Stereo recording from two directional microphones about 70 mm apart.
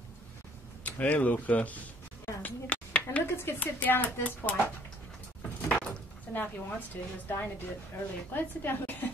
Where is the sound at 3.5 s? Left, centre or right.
Left.